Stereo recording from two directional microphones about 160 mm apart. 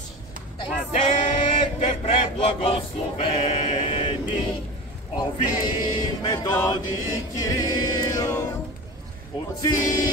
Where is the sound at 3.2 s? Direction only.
40° left (ahead or behind).